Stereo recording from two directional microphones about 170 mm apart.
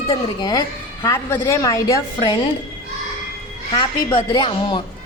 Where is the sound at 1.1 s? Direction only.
15° left (ahead or behind).